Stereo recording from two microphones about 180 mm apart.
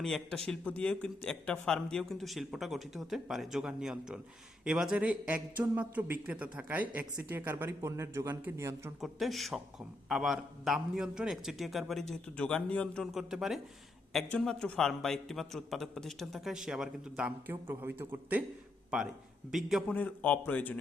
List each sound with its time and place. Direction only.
0.0 s a man's voice: 5° left (ahead or behind); by 8.9 s 15° right (ahead or behind)
9.0 s a man's voice: centre (ahead or behind)
19.5 s a man's voice: centre (ahead or behind)